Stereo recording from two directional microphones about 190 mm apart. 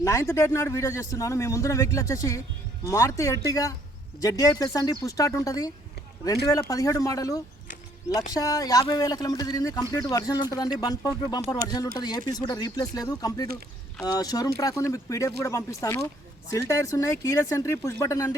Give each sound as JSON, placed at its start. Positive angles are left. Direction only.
{"t": 0.0, "sound": "speech", "side_deg": 15}